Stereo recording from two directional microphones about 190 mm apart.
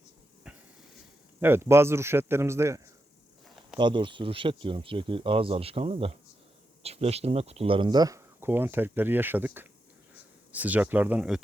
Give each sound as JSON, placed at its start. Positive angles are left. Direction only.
{"t": 0.4, "sound": "a sound", "side_deg": -5}
{"t": 1.4, "sound": "a man's voice", "side_deg": -10}
{"t": 3.8, "sound": "a man's voice", "side_deg": -25}